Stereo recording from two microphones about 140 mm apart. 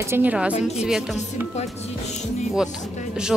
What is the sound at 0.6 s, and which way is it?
Speech, 50° left (ahead or behind).